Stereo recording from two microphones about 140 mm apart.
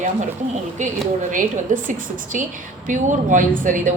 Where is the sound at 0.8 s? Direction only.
55° right (ahead or behind).